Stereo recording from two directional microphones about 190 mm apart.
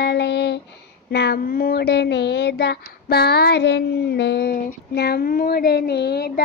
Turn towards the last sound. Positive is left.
turn(degrees=55)  # may be behind; listen again after turning